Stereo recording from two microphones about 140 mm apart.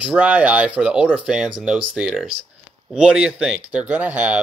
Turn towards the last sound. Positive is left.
turn(degrees=-10)  # may be behind; listen again after turning